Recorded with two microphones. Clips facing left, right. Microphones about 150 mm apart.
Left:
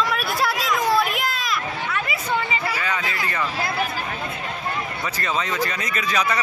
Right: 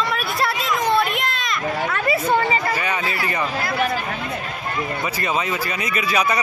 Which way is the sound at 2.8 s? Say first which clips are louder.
Right 2 dB; 20° right (ahead or behind).